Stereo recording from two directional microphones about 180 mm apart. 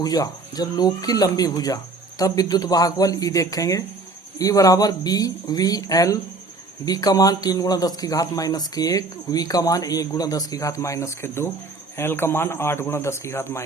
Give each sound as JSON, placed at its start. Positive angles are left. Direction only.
{"t": 0.0, "sound": "a man's voice", "side_deg": 20}